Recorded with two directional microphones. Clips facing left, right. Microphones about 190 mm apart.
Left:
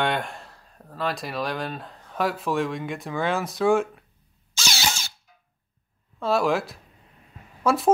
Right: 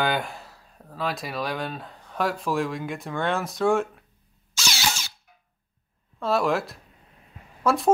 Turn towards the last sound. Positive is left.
turn(degrees=0)  # may be behind; listen again after turning